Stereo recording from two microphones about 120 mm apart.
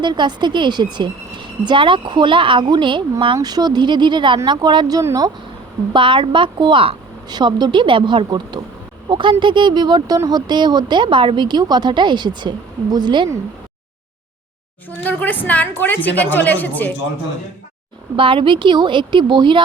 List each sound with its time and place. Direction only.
0.0 s a woman's voice: 40° right (ahead or behind)
3.3 s a woman's voice: 35° right (ahead or behind)
5.9 s a woman's voice: 45° right (ahead or behind)
14.8 s speech: 15° left (ahead or behind)
18.2 s speech: 45° right (ahead or behind)